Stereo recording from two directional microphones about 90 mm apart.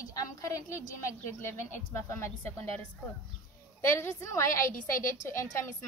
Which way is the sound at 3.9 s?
35° left (ahead or behind).